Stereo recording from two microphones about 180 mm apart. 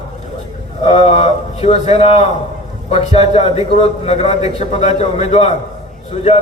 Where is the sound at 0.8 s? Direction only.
35° left (ahead or behind).